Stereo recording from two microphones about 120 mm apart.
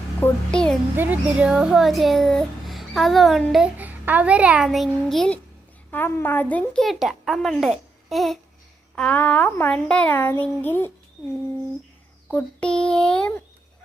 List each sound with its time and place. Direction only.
0.5 s speech: 5° left (ahead or behind)
0.9 s a child's voice: 15° right (ahead or behind)
3.8 s a child's voice: 15° right (ahead or behind); by 5.4 s 5° left (ahead or behind)
5.9 s speech: 20° left (ahead or behind)
6.8 s a child's voice: centre (ahead or behind)
9.0 s speech: 10° left (ahead or behind)
12.3 s speech: 10° left (ahead or behind)